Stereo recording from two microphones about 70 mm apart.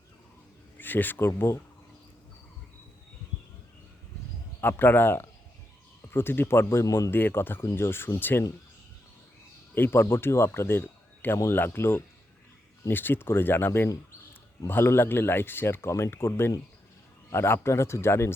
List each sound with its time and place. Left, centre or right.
0.8 s speech: left
1.3 s speech: left
4.6 s speech: left
7.6 s speech: left
9.7 s speech: left